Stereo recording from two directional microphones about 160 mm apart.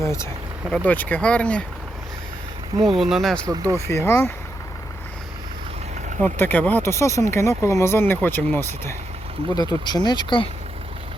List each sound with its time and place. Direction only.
0.0 s speech: 20° left (ahead or behind)
3.0 s speech: centre (ahead or behind)
3.4 s speech: 20° right (ahead or behind)
3.8 s speech: 15° left (ahead or behind)
6.2 s speech: 10° left (ahead or behind)
9.6 s speech: 25° left (ahead or behind)